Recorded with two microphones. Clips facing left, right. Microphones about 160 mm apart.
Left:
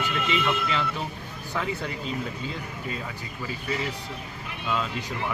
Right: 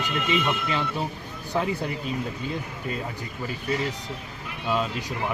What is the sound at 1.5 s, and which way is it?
Speech, 30° right (ahead or behind).